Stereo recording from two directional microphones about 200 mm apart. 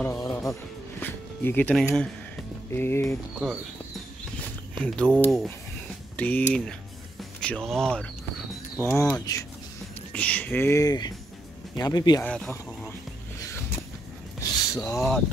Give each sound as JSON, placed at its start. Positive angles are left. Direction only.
{"t": 0.0, "sound": "music", "side_deg": 15}
{"t": 1.0, "sound": "speech", "side_deg": 10}
{"t": 4.4, "sound": "a sound", "side_deg": 5}
{"t": 5.2, "sound": "speech", "side_deg": 0}
{"t": 9.2, "sound": "speech", "side_deg": 15}
{"t": 10.1, "sound": "speech", "side_deg": 5}
{"t": 12.2, "sound": "speech", "side_deg": 5}
{"t": 13.4, "sound": "a sound", "side_deg": 15}
{"t": 14.7, "sound": "speech", "side_deg": 15}
{"t": 15.0, "sound": "speech", "side_deg": 0}